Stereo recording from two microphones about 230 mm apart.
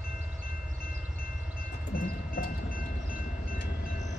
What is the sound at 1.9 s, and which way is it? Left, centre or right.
Train, left.